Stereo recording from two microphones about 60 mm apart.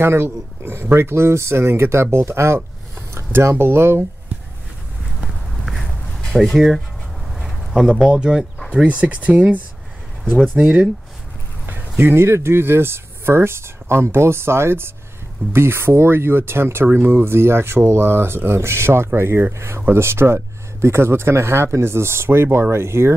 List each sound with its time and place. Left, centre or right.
0.0 s speech: right
5.2 s a sound: centre
6.5 s speech: centre; by 9.6 s right
10.3 s speech: centre
12.0 s speech: right